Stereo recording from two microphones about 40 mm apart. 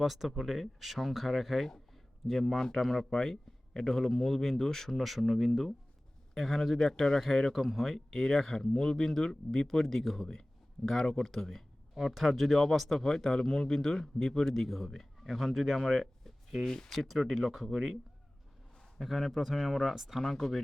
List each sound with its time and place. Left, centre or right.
0.0 s speech: centre
11.9 s speech: centre
16.6 s speech: centre
17.3 s speech: centre
18.9 s speech: centre
20.2 s speech: centre